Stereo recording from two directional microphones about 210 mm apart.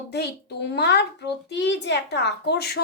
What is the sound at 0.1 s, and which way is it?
A woman's voice, 50° left (ahead or behind).